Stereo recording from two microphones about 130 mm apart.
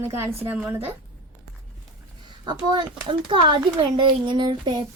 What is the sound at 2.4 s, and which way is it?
A child's voice, 35° right (ahead or behind).